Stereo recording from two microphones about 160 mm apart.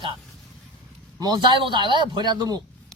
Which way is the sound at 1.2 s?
25° right (ahead or behind).